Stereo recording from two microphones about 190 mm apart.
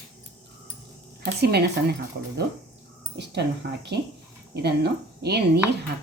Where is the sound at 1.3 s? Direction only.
60° right (ahead or behind).